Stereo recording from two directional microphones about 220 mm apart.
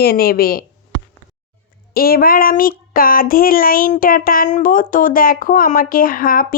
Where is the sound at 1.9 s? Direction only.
40° left (ahead or behind).